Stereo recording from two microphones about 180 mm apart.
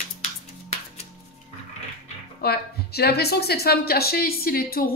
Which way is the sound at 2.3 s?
60° left (ahead or behind).